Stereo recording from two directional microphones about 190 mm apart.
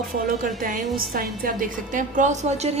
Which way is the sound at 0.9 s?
50° right (ahead or behind).